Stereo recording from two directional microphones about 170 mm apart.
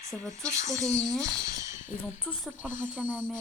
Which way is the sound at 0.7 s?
20° right (ahead or behind).